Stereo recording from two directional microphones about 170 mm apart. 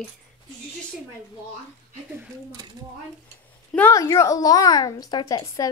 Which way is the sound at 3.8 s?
20° left (ahead or behind).